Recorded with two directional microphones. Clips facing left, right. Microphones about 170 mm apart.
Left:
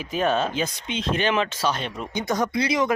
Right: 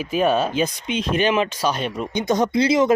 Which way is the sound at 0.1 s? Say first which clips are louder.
Right 3 dB; 10° right (ahead or behind).